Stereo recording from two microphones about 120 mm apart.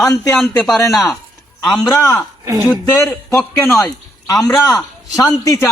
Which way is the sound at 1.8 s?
30° left (ahead or behind).